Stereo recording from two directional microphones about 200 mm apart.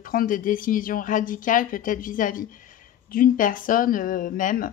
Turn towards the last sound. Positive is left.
turn(degrees=40)  # may be behind; listen again after turning